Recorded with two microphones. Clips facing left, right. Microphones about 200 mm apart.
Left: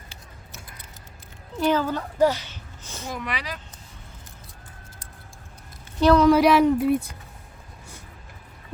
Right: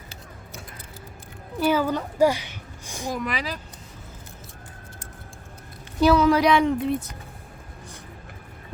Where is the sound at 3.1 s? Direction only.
40° right (ahead or behind).